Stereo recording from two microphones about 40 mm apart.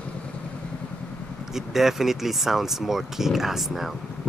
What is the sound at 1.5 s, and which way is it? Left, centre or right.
Speech, centre.